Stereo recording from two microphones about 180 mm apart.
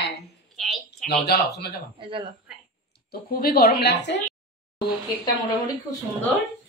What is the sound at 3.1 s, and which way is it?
A woman's voice, 55° left (ahead or behind).